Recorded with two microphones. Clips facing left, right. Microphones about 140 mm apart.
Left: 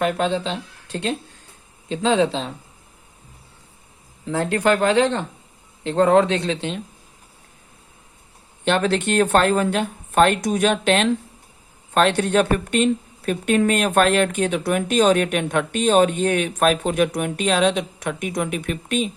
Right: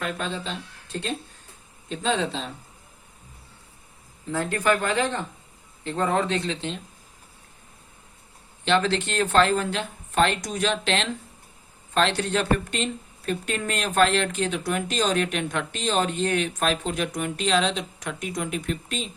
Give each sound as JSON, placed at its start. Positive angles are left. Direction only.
{"t": 0.0, "sound": "speech", "side_deg": 85}
{"t": 4.3, "sound": "speech", "side_deg": 75}
{"t": 5.8, "sound": "speech", "side_deg": 90}
{"t": 8.6, "sound": "speech", "side_deg": 55}